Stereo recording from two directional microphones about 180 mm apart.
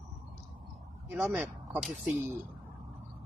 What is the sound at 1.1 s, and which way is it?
Speech, 10° right (ahead or behind).